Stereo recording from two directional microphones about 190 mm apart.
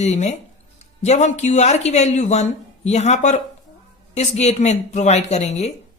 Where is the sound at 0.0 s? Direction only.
35° left (ahead or behind).